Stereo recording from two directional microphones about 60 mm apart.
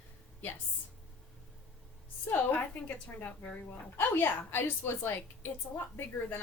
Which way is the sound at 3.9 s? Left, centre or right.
Left.